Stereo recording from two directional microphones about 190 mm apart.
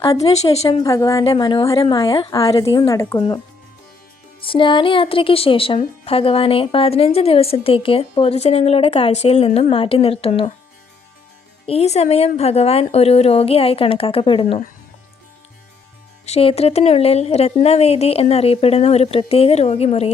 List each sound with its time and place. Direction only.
0.2 s a woman's voice: 35° left (ahead or behind)
0.8 s a woman's voice: 15° left (ahead or behind)
1.2 s speech: 25° left (ahead or behind)
11.6 s a woman's voice: 30° left (ahead or behind)
16.2 s a woman's voice: 30° left (ahead or behind)